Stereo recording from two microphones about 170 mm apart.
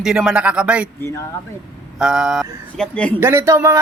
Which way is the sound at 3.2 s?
15° right (ahead or behind).